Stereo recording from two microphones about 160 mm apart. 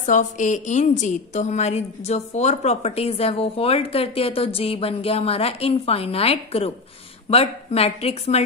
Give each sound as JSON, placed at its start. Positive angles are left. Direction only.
{"t": 0.0, "sound": "a woman's voice", "side_deg": 50}